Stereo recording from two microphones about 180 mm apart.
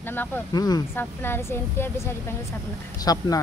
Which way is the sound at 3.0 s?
20° left (ahead or behind).